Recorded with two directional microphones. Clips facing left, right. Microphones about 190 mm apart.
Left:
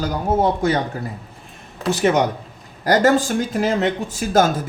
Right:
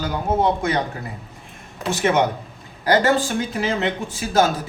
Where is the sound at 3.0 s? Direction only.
45° left (ahead or behind).